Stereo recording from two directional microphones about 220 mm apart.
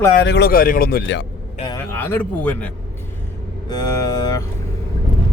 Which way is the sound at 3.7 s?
15° left (ahead or behind).